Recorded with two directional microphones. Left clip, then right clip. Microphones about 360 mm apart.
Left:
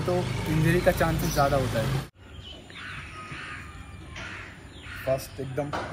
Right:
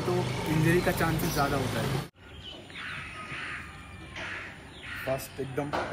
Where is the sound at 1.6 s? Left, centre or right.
Right.